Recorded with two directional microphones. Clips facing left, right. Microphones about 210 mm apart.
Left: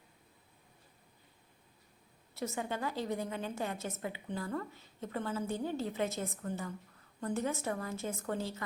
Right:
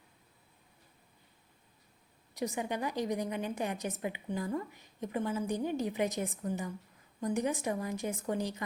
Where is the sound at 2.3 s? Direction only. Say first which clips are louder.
Right 3 dB; 15° right (ahead or behind).